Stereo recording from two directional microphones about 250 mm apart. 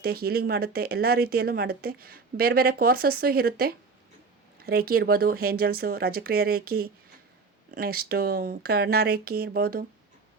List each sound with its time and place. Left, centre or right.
0.0 s speech: right